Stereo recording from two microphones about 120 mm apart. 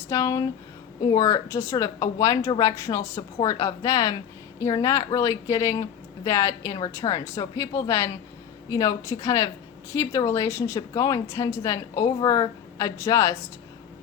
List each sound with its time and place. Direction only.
0.1 s a woman's voice: 30° left (ahead or behind)